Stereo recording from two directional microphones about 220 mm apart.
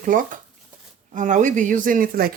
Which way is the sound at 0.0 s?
35° right (ahead or behind).